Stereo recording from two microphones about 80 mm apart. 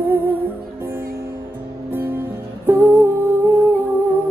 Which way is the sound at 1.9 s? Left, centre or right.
Right.